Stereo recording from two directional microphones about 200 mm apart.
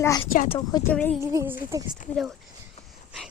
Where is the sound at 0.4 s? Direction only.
25° left (ahead or behind).